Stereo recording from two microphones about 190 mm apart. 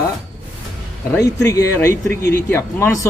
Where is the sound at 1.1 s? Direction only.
15° left (ahead or behind).